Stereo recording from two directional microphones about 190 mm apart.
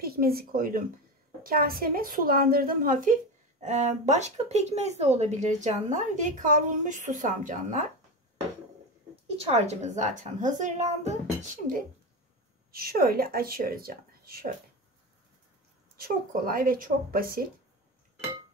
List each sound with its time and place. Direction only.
0.0 s speech: 50° right (ahead or behind)
9.4 s speech: 35° right (ahead or behind); by 14.5 s 50° right (ahead or behind)
16.0 s speech: 50° right (ahead or behind)